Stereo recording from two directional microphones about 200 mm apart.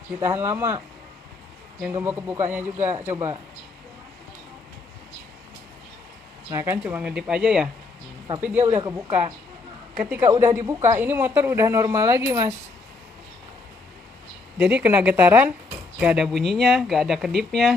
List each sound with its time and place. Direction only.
0.2 s speech: 10° right (ahead or behind)
1.9 s speech: 10° right (ahead or behind)
6.5 s speech: 10° right (ahead or behind)
8.6 s speech: 20° right (ahead or behind)
10.0 s speech: 10° right (ahead or behind)
14.6 s speech: 5° right (ahead or behind)